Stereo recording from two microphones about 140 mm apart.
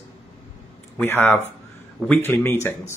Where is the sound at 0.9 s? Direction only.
15° left (ahead or behind).